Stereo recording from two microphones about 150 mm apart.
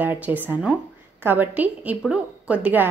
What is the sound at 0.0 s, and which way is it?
A woman's voice, 10° right (ahead or behind).